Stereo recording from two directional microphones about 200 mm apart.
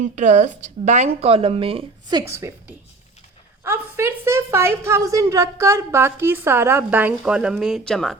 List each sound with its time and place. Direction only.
0.0 s a woman's voice: 35° right (ahead or behind); by 8.1 s centre (ahead or behind)